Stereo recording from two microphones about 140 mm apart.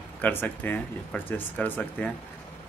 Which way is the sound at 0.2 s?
15° left (ahead or behind).